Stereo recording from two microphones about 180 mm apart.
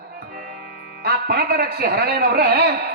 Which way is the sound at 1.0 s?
65° right (ahead or behind).